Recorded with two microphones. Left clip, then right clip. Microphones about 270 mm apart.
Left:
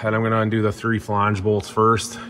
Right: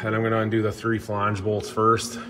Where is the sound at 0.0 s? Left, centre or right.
Centre.